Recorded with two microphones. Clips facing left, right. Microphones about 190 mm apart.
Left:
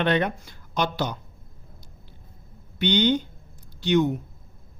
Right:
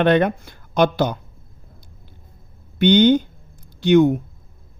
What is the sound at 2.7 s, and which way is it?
Speech, 50° right (ahead or behind).